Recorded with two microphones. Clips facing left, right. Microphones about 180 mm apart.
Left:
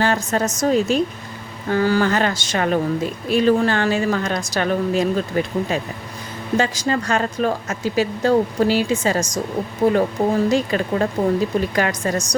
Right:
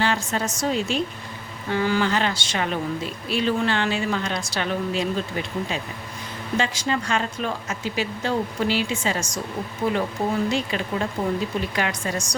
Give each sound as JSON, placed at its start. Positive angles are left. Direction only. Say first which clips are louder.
{"t": 0.0, "sound": "a woman's voice", "louder": "left 5 dB", "side_deg": 45}